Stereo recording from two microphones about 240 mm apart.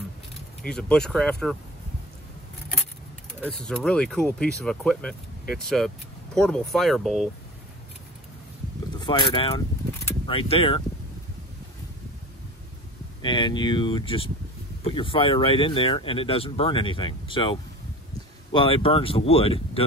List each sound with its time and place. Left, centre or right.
0.6 s speech: centre
3.4 s speech: centre
6.3 s speech: centre
9.0 s speech: left
13.2 s speech: centre